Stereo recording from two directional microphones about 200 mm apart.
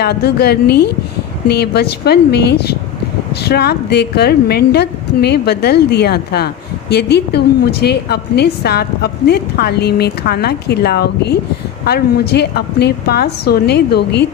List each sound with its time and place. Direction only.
0.0 s a woman's voice: 55° left (ahead or behind)